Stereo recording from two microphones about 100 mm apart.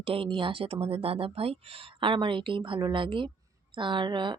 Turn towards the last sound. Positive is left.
turn(degrees=-50)  # may be behind; listen again after turning